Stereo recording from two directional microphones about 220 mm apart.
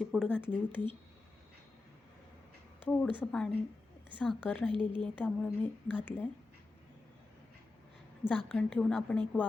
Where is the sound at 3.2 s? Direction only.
5° left (ahead or behind).